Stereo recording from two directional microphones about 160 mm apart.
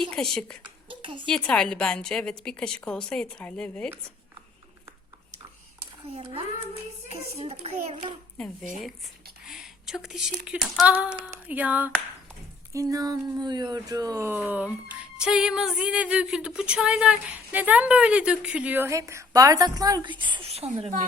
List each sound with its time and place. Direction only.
0.0 s a woman's voice: 5° left (ahead or behind)
0.9 s a sound: 30° right (ahead or behind)
1.3 s a woman's voice: 5° left (ahead or behind)
6.1 s a child's voice: 35° right (ahead or behind)
9.4 s speech: 5° right (ahead or behind)
12.7 s speech: 20° right (ahead or behind); by 20.9 s 40° right (ahead or behind)